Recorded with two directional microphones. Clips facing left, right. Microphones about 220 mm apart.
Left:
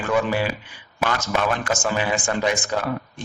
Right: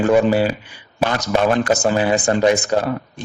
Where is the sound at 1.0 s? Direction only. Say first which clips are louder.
Right 5 dB; 35° right (ahead or behind).